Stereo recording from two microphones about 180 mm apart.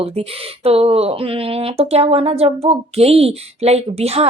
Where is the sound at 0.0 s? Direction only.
35° right (ahead or behind).